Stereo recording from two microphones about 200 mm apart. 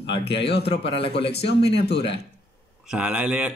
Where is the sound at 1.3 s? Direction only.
55° left (ahead or behind).